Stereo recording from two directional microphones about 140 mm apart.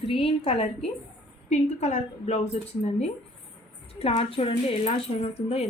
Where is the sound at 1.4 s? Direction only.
55° left (ahead or behind).